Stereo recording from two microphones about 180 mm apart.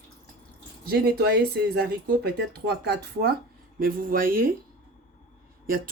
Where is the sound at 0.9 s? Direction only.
60° right (ahead or behind).